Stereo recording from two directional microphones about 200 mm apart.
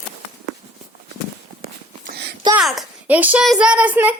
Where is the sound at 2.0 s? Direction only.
50° right (ahead or behind).